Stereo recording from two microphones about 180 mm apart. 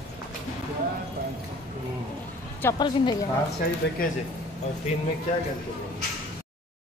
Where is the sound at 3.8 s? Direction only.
80° left.